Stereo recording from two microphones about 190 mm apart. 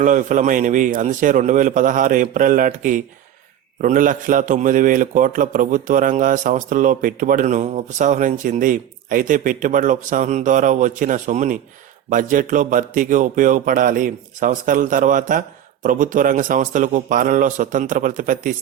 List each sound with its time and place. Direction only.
0.0 s a man's voice: 40° right (ahead or behind)